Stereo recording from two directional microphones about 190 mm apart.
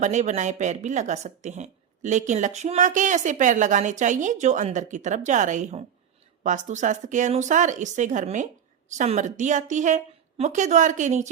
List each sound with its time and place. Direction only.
0.0 s a woman's voice: 40° right (ahead or behind)